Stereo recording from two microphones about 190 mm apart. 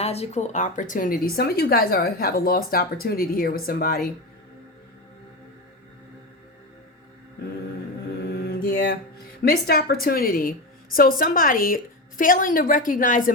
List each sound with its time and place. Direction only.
0.0 s speech: 35° left (ahead or behind); by 4.0 s 50° left (ahead or behind)
8.2 s mantra: 55° left (ahead or behind)
9.4 s speech: 50° left (ahead or behind)